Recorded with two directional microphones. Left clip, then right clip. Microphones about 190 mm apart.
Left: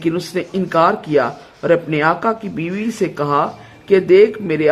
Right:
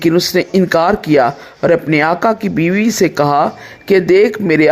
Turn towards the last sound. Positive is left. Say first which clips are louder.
# right 2 dB
turn(degrees=-25)  # may be behind; listen again after turning